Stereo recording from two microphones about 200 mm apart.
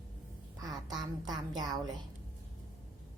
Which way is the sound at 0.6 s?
20° right (ahead or behind).